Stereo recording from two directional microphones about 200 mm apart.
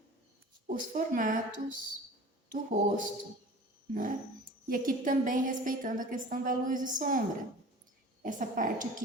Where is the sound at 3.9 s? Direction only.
45° right (ahead or behind).